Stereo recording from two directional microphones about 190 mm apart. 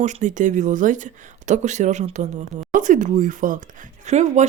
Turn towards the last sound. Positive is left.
turn(degrees=-40)  # may be behind; listen again after turning